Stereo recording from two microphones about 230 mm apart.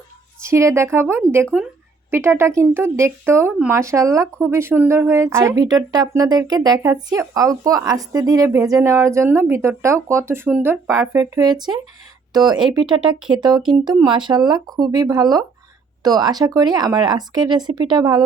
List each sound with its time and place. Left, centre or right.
0.4 s speech: centre